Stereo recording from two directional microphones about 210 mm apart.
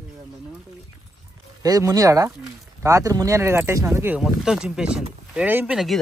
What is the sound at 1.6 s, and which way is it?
Speech, 15° right (ahead or behind).